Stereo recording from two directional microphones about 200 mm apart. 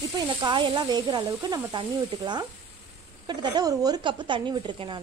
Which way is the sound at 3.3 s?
20° right (ahead or behind).